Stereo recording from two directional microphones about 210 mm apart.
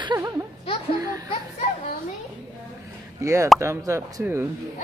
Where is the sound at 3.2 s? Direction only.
15° right (ahead or behind).